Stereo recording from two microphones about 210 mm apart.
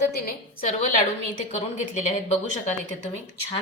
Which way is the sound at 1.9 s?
35° left (ahead or behind).